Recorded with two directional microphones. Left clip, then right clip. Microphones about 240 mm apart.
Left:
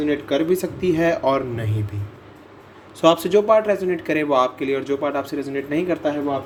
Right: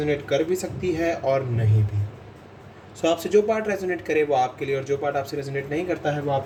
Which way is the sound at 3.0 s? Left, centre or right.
Left.